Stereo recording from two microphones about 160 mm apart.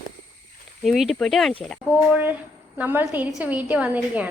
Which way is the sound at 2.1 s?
10° right (ahead or behind).